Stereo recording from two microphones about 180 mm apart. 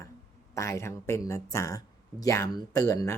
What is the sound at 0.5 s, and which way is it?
Speech, 15° left (ahead or behind).